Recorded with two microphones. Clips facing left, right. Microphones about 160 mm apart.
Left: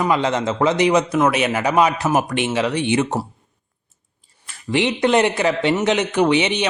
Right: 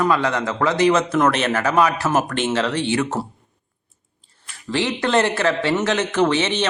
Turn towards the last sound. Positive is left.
turn(degrees=15)  # may be behind; listen again after turning